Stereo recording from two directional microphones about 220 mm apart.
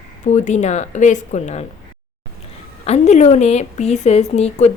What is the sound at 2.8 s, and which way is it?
A woman's voice, 30° left (ahead or behind).